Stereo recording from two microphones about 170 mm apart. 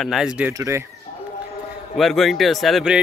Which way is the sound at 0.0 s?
Centre (ahead or behind).